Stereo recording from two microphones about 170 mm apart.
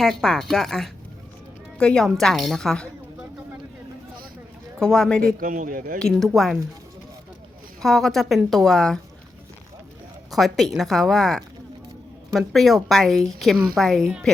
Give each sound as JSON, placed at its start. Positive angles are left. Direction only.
{"t": 0.0, "sound": "a woman's voice", "side_deg": 5}
{"t": 4.8, "sound": "a woman's voice", "side_deg": 5}
{"t": 5.2, "sound": "speech", "side_deg": -55}
{"t": 6.0, "sound": "a woman's voice", "side_deg": 0}
{"t": 7.8, "sound": "a woman's voice", "side_deg": 0}
{"t": 10.3, "sound": "a woman's voice", "side_deg": 0}